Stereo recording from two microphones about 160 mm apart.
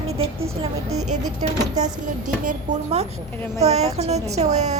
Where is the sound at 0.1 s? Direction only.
35° right (ahead or behind).